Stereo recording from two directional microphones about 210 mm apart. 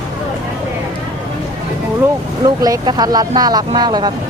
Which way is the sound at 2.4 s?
20° right (ahead or behind).